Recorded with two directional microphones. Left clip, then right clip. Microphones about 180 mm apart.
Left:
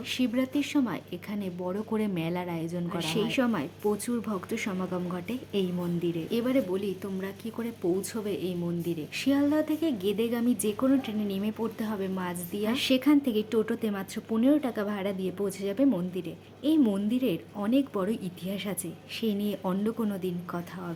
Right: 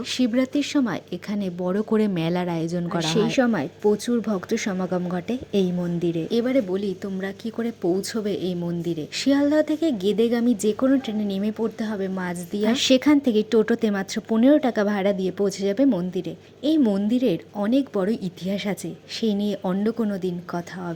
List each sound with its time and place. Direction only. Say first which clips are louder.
0.1 s speech: right 6 dB; 30° right (ahead or behind)